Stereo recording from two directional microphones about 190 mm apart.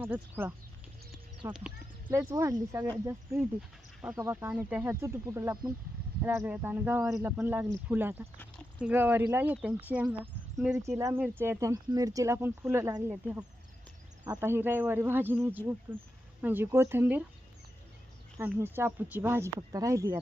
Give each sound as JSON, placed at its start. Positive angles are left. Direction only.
{"t": 0.0, "sound": "speech", "side_deg": -10}
{"t": 1.5, "sound": "a sound", "side_deg": -5}
{"t": 2.1, "sound": "speech", "side_deg": -15}
{"t": 4.2, "sound": "speech", "side_deg": -15}
{"t": 10.8, "sound": "speech", "side_deg": -15}
{"t": 18.3, "sound": "speech", "side_deg": -10}